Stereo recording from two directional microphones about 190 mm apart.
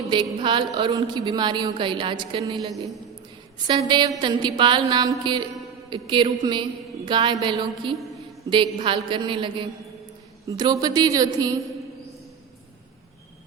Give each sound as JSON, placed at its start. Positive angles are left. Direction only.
{"t": 0.3, "sound": "a woman's voice", "side_deg": -25}